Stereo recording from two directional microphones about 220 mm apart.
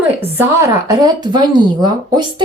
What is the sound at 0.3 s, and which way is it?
A woman's voice, 15° right (ahead or behind).